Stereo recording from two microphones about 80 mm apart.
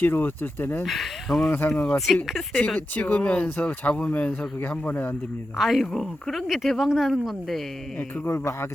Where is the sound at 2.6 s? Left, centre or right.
Centre.